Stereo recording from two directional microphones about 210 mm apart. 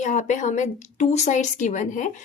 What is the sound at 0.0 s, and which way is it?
A woman's voice, 35° left (ahead or behind).